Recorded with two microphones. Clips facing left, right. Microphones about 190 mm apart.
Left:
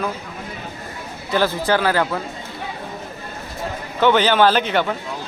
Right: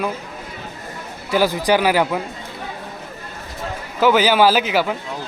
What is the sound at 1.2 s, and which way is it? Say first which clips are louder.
Speech: right 2 dB; 10° right (ahead or behind).